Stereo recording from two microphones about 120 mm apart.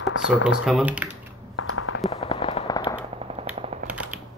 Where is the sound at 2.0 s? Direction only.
50° left (ahead or behind).